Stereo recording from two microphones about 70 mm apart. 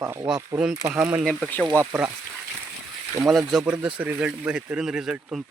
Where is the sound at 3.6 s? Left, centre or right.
Centre.